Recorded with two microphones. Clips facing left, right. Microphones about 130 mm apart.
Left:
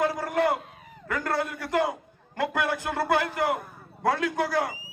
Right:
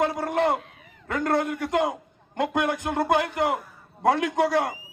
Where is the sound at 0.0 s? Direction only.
25° right (ahead or behind).